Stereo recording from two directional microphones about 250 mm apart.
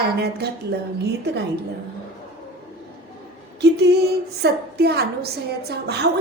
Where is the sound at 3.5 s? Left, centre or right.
Right.